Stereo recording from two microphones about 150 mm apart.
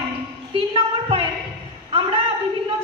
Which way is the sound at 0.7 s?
35° right (ahead or behind).